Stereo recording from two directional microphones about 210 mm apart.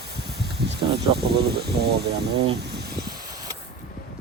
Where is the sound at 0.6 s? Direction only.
50° right (ahead or behind).